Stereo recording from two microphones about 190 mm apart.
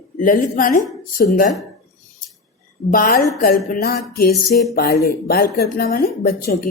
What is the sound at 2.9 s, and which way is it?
Speech, 50° left (ahead or behind).